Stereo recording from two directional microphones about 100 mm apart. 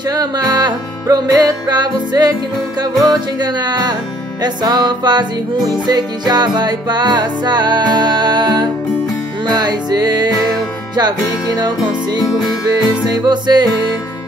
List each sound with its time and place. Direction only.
0.1 s music: 40° right (ahead or behind)